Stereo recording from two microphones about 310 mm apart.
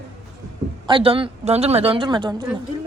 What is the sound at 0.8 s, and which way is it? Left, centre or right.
A woman's voice, centre.